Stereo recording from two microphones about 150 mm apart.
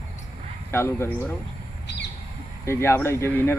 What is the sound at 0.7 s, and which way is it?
Speech, 15° left (ahead or behind).